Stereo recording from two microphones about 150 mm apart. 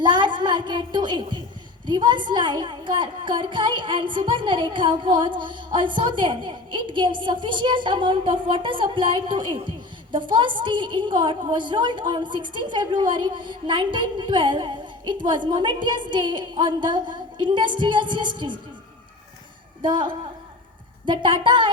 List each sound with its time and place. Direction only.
0.0 s a woman's voice: 30° right (ahead or behind)
19.8 s a woman's voice: 30° right (ahead or behind)